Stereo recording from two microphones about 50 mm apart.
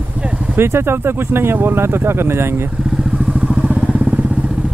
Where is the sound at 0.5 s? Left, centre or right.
Right.